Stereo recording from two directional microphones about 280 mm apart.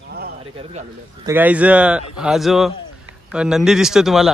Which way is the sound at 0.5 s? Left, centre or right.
Centre.